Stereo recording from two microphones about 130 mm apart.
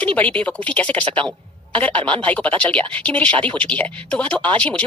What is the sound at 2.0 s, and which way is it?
Speech, 40° right (ahead or behind).